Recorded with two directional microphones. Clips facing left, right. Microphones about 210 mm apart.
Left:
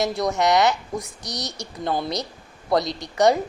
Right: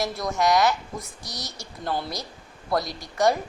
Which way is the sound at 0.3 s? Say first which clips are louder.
Left 1 dB; 65° left (ahead or behind).